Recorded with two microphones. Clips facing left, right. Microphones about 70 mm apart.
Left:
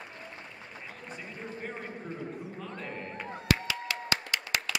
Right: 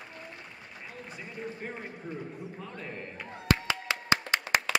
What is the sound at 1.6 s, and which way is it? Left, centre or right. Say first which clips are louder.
Speech: left 3 dB; centre.